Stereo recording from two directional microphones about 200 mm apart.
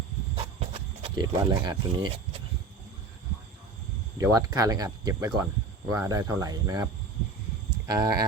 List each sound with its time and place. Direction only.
0.3 s wild animals: 25° right (ahead or behind)
4.2 s speech: 15° right (ahead or behind)
7.9 s speech: 20° right (ahead or behind)